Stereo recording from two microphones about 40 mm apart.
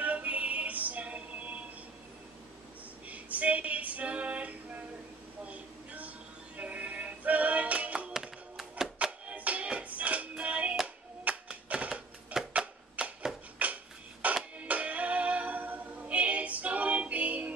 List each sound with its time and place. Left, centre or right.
0.0 s music: right
3.1 s female singing: right
5.4 s music: right
8.5 s music: centre
9.4 s music: right
11.3 s typewriter: right
12.3 s a sound: right
13.0 s chopping: right
13.6 s a sound: right
14.2 s music: right
14.6 s a capella: right